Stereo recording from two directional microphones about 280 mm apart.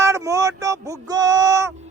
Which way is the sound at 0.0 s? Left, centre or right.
Centre.